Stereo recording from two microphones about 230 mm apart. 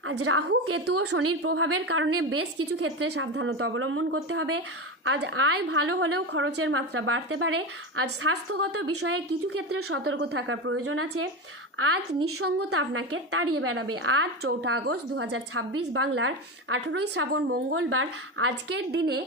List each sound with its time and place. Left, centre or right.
0.2 s a woman's voice: right
3.1 s a woman's voice: right
5.0 s a woman's voice: right
5.8 s a woman's voice: right
10.3 s a woman's voice: right
15.3 s a woman's voice: right
15.9 s a woman's voice: right
17.0 s a woman's voice: right